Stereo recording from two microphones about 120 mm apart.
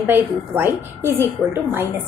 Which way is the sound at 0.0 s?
20° right (ahead or behind).